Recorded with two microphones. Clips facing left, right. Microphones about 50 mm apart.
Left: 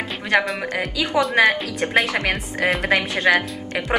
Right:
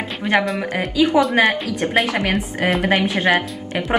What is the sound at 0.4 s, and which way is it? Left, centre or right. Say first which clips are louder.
A woman's voice: right 2 dB; centre.